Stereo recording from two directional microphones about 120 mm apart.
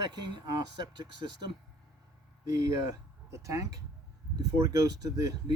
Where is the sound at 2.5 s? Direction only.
30° right (ahead or behind).